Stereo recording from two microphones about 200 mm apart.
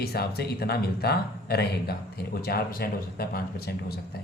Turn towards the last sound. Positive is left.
turn(degrees=50)  # may be behind; listen again after turning